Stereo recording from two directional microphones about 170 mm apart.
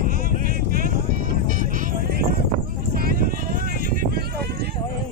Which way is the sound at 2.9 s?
60° right (ahead or behind).